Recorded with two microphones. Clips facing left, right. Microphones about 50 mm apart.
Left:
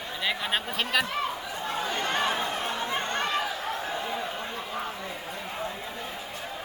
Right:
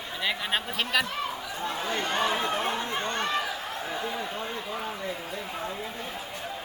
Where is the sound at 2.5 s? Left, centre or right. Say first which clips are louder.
Right 2 dB; right.